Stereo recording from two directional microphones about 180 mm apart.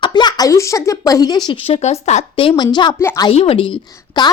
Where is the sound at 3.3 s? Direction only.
30° left (ahead or behind).